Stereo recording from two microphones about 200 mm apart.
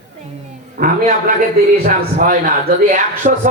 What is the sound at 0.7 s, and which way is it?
A man's voice, 45° right (ahead or behind).